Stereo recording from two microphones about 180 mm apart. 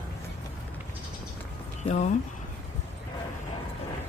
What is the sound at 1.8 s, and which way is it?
Speech, 40° left (ahead or behind).